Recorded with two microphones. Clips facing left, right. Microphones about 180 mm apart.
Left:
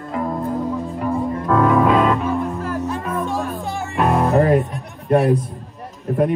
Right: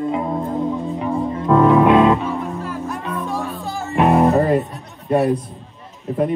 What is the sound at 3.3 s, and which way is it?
Music, 20° left (ahead or behind).